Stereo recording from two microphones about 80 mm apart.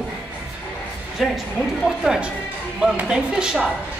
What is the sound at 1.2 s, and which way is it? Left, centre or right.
A woman's voice, centre.